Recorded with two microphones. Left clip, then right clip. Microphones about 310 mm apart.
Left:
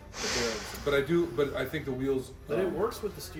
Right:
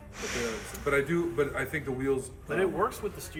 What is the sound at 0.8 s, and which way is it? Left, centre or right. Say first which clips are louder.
A man's voice: even; centre.